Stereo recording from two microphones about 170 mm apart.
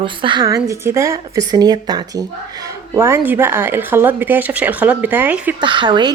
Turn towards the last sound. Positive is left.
turn(degrees=-25)  # may be behind; listen again after turning